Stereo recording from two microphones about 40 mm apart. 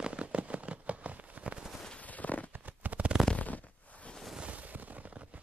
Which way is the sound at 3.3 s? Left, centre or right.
Left.